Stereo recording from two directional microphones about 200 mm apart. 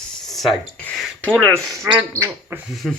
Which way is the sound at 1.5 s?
15° right (ahead or behind).